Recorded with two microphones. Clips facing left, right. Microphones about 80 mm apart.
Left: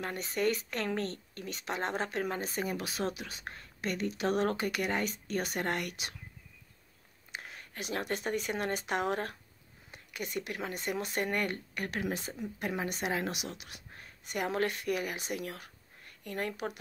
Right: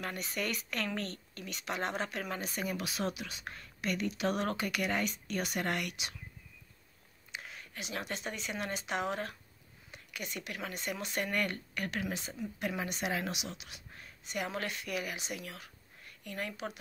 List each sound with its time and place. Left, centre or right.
0.0 s speech: left
7.3 s speech: left
13.3 s speech: left